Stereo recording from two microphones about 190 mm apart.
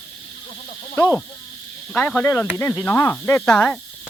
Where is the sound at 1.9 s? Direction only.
5° left (ahead or behind).